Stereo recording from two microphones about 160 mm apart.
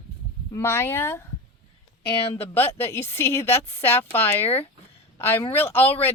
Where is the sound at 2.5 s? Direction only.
15° left (ahead or behind).